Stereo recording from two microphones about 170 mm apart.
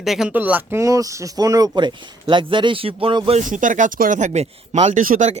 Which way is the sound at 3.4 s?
50° right (ahead or behind).